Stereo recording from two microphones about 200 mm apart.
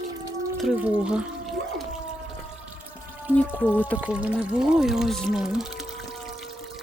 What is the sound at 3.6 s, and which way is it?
Speech, 10° left (ahead or behind).